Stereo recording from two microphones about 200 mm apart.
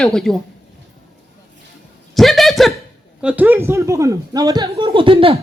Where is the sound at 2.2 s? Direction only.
Centre (ahead or behind).